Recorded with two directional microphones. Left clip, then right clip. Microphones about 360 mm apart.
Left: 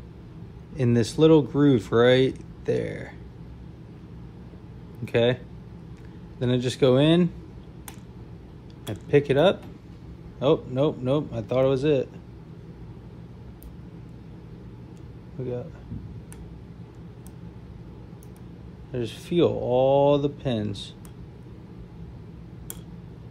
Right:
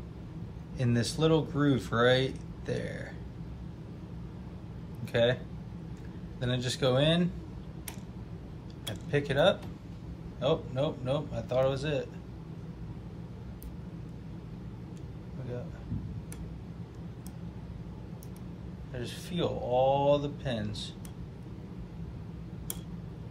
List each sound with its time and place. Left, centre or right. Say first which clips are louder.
0.7 s speech: left 9 dB; centre
5.0 s speech: left 5 dB; centre
6.4 s a man's voice: left 8 dB; centre
9.1 s a man's voice: left 7 dB; centre
18.9 s a man's voice: left 12 dB; centre